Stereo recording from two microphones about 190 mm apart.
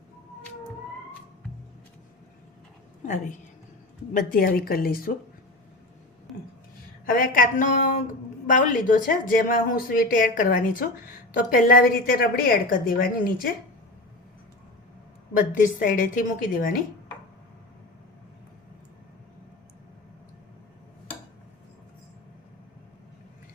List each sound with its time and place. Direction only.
4.1 s speech: 45° left (ahead or behind)
7.0 s speech: 50° left (ahead or behind)
15.5 s speech: 45° left (ahead or behind)